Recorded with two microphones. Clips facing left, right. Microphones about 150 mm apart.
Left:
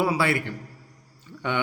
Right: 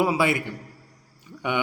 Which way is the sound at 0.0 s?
20° right (ahead or behind).